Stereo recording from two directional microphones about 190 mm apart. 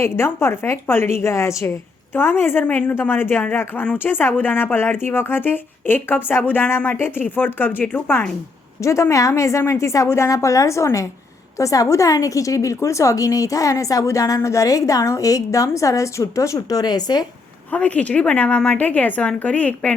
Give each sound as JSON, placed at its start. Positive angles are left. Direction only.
{"t": 0.0, "sound": "a woman's voice", "side_deg": 15}
{"t": 17.7, "sound": "a woman's voice", "side_deg": 5}